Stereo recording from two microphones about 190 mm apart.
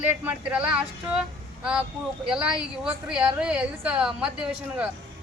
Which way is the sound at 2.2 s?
5° right (ahead or behind).